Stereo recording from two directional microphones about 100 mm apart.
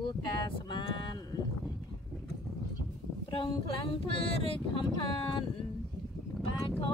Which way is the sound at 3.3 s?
65° left (ahead or behind).